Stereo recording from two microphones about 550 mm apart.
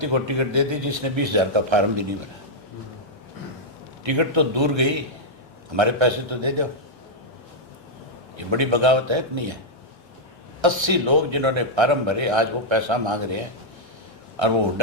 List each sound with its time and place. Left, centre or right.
0.0 s a man's voice: right
4.0 s a man's voice: right
8.4 s a man's voice: right
10.6 s a man's voice: right